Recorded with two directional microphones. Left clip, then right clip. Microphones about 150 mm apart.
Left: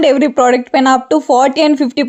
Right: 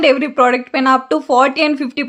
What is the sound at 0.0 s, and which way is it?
A woman's voice, 40° left (ahead or behind).